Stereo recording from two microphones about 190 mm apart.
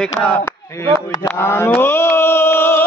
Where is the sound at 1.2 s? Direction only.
10° left (ahead or behind).